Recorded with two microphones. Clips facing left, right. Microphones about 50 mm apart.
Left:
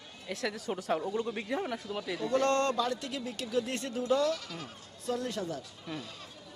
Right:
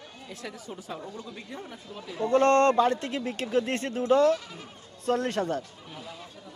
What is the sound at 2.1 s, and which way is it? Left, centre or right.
A man's voice, right.